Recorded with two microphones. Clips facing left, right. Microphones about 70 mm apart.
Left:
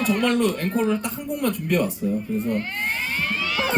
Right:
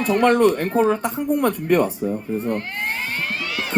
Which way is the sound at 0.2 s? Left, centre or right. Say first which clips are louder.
Right 5 dB; right.